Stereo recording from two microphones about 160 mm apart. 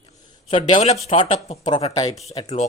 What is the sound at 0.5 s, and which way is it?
Speech, 30° left (ahead or behind).